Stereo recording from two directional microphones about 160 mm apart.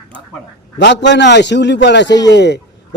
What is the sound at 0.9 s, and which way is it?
Speech, 90° left.